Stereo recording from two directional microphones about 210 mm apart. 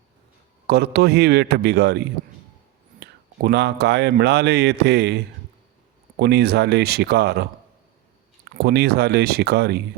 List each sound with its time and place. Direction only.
0.7 s speech: 50° right (ahead or behind)
8.5 s speech: 50° right (ahead or behind)